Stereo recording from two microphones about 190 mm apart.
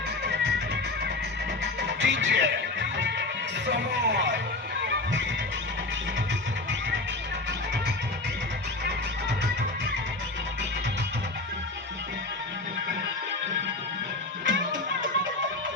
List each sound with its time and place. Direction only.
1.6 s music: 70° right (ahead or behind)
14.4 s music: 80° right